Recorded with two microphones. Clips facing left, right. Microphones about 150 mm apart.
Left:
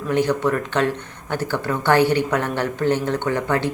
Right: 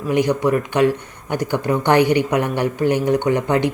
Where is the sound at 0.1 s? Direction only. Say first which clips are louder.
Right 2 dB; 15° right (ahead or behind).